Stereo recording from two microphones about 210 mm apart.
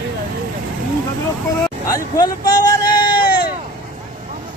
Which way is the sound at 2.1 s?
20° left (ahead or behind).